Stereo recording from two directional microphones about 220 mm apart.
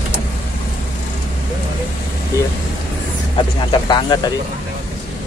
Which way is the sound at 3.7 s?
20° left (ahead or behind).